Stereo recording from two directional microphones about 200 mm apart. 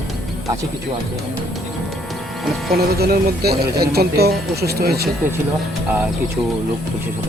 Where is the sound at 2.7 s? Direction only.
50° right (ahead or behind).